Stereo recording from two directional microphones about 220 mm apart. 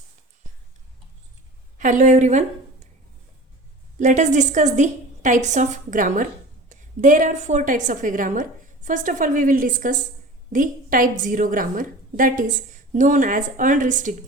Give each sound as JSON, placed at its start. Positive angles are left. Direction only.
{"t": 1.8, "sound": "a woman's voice", "side_deg": -35}
{"t": 3.9, "sound": "a woman's voice", "side_deg": -35}